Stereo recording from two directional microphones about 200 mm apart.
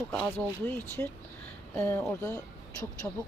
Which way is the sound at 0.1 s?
5° left (ahead or behind).